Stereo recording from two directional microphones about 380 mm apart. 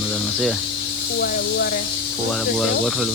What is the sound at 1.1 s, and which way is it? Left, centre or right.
Speech, left.